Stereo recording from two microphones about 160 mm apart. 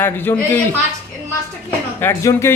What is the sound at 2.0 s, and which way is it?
Speech, 15° left (ahead or behind).